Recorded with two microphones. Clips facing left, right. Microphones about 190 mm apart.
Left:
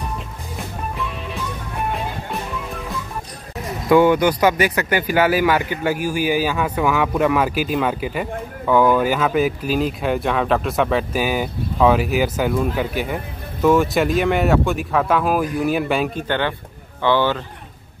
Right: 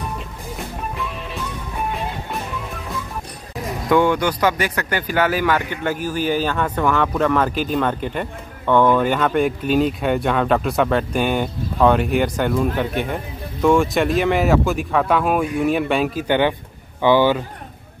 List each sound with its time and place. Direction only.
4.0 s speech: 10° left (ahead or behind)
16.3 s speech: 15° right (ahead or behind)